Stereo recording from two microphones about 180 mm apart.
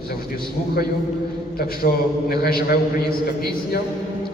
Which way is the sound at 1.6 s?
55° left (ahead or behind).